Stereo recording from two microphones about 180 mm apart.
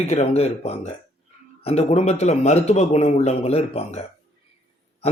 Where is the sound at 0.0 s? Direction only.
35° left (ahead or behind).